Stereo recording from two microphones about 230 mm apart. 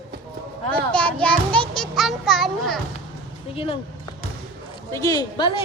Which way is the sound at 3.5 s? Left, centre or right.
Left.